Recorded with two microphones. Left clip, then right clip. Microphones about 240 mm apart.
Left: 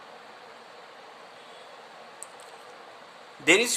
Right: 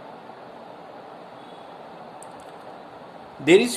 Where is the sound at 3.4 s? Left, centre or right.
Left.